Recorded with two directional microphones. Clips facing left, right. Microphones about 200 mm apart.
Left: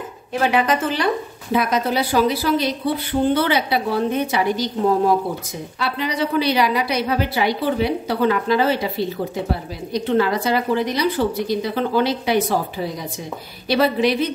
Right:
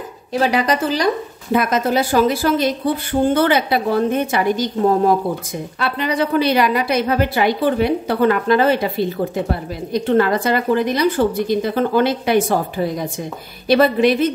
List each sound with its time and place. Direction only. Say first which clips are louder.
0.3 s speech: right 1 dB; 35° right (ahead or behind); by 8.8 s 55° right (ahead or behind)
9.9 s speech: right 3 dB; 50° right (ahead or behind)